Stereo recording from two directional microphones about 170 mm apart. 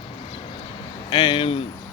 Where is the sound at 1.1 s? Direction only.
25° left (ahead or behind).